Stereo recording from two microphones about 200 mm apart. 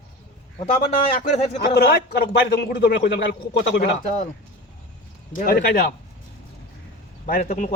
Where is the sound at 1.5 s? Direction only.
55° left (ahead or behind).